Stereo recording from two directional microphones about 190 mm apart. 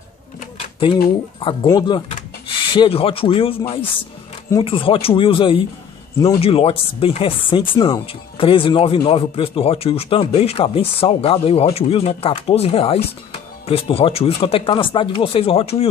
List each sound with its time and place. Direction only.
1.4 s speech: 25° left (ahead or behind)
6.4 s speech: 30° left (ahead or behind)